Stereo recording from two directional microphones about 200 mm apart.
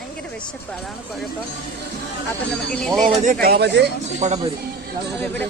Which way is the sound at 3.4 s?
55° right (ahead or behind).